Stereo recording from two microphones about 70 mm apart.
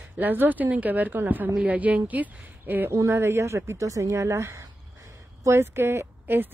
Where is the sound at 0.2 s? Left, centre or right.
Right.